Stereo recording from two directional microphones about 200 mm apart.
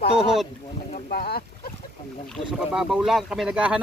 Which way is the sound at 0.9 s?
45° left (ahead or behind).